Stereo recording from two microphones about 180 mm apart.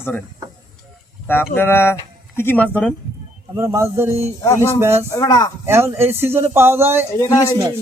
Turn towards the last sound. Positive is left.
turn(degrees=15)  # may be behind; listen again after turning